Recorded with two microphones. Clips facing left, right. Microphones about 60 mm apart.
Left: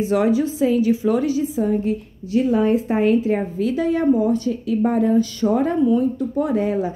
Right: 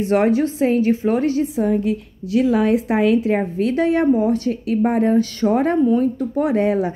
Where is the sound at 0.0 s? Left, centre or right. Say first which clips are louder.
Right 2 dB; right.